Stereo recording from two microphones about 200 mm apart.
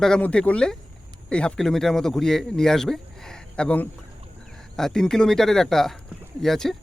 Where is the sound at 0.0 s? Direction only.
5° left (ahead or behind).